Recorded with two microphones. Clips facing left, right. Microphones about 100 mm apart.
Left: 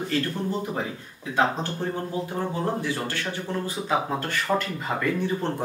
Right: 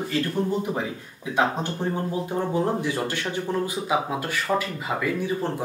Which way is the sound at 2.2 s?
20° right (ahead or behind).